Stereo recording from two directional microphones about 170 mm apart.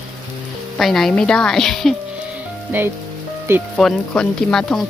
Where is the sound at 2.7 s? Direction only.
10° right (ahead or behind).